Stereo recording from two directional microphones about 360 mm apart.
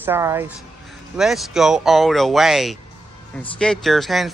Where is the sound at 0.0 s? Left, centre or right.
Centre.